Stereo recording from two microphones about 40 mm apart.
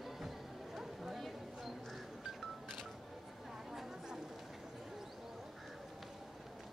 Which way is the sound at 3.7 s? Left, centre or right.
Centre.